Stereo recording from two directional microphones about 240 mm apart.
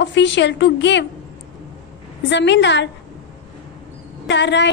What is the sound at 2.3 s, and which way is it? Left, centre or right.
Speech, left.